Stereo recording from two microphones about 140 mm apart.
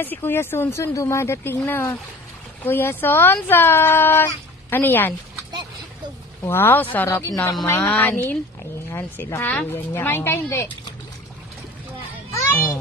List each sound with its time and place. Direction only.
0.0 s speech: 15° left (ahead or behind)
6.4 s speech: 15° left (ahead or behind)
7.1 s speech: 25° left (ahead or behind)
12.4 s children playing: 20° left (ahead or behind)